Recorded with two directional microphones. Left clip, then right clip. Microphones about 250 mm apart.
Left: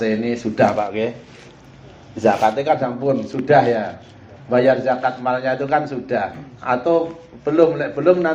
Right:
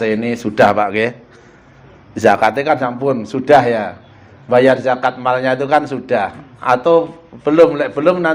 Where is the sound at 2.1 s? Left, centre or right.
Right.